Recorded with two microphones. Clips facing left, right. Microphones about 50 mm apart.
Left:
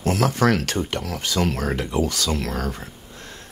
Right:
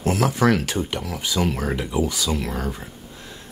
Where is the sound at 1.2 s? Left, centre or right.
Left.